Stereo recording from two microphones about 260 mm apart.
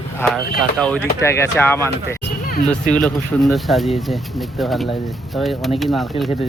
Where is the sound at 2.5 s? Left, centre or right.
Left.